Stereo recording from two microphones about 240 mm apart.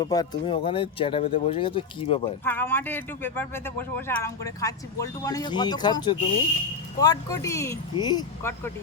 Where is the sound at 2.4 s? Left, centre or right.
Centre.